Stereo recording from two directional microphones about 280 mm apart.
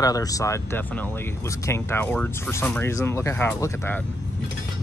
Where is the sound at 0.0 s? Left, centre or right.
Centre.